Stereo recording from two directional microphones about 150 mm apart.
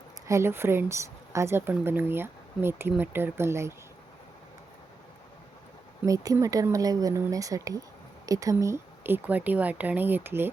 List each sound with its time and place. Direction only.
0.3 s speech: 20° right (ahead or behind)
6.1 s speech: 20° right (ahead or behind)